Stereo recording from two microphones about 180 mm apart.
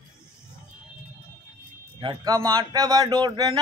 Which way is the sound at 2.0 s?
20° right (ahead or behind).